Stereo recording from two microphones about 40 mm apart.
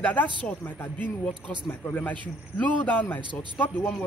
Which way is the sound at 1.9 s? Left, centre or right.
Left.